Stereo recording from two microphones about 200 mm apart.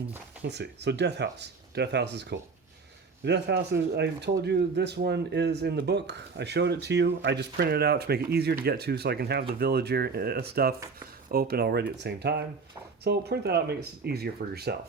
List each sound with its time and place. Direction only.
0.4 s speech: 60° right (ahead or behind)